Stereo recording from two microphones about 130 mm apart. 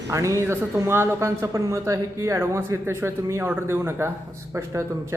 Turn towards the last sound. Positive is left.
turn(degrees=-20)  # may be behind; listen again after turning